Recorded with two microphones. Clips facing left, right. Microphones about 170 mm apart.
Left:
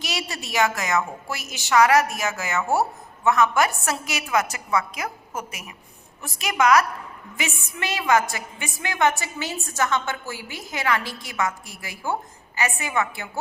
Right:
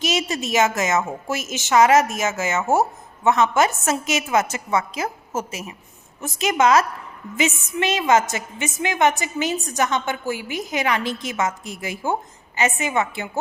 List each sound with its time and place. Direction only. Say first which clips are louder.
0.0 s a woman's voice: right 8 dB; 20° right (ahead or behind)